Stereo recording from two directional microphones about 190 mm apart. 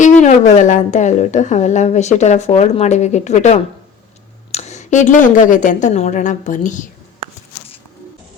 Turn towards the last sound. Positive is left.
turn(degrees=40)  # may be behind; listen again after turning